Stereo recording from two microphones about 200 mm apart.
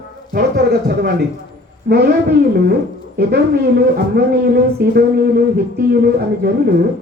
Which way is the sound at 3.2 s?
50° right (ahead or behind).